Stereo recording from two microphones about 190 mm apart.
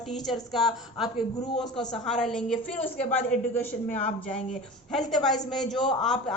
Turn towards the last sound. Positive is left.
turn(degrees=0)  # may be behind; listen again after turning